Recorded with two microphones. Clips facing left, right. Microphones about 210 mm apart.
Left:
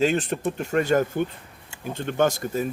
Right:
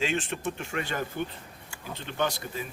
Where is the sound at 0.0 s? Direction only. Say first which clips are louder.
Left 7 dB; 40° left (ahead or behind).